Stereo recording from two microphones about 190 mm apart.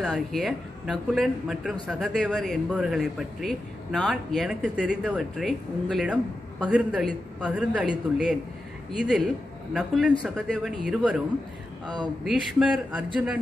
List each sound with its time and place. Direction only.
0.0 s speech: centre (ahead or behind)
9.0 s speech: centre (ahead or behind)
11.8 s a woman's voice: 25° right (ahead or behind)
12.3 s speech: 5° right (ahead or behind)